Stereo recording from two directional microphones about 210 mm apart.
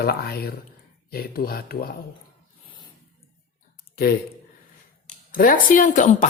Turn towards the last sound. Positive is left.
turn(degrees=35)  # may be behind; listen again after turning